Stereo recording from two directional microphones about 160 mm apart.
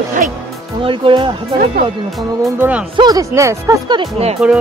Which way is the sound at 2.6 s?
10° right (ahead or behind).